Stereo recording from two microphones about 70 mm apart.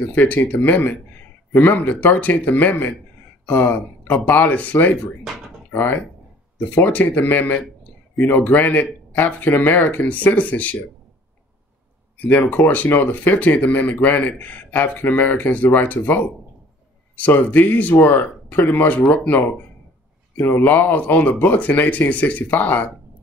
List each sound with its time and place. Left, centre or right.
0.1 s speech: left
12.2 s speech: left